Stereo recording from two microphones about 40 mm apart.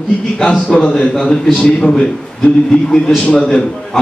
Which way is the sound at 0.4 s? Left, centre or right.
Left.